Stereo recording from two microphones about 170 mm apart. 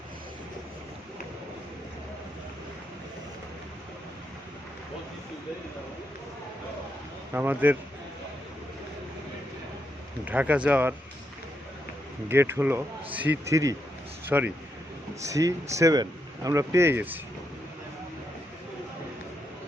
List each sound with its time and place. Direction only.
7.3 s speech: 10° right (ahead or behind)
10.2 s speech: 10° right (ahead or behind)
12.3 s speech: 15° right (ahead or behind)